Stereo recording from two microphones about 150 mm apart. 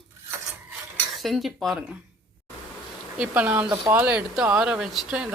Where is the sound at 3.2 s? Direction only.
10° right (ahead or behind).